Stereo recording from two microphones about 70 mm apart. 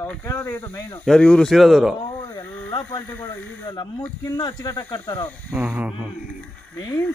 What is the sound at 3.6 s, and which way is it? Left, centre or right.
Speech, left.